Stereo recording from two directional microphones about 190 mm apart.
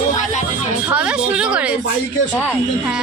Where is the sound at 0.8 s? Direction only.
5° right (ahead or behind).